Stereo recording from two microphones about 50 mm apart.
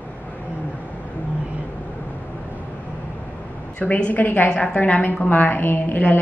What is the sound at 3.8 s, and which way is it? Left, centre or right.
A woman's voice, left.